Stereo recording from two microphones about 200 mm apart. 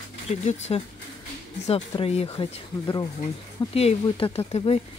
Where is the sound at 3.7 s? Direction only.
30° left (ahead or behind).